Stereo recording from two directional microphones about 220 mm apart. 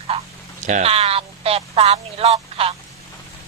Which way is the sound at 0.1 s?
25° right (ahead or behind).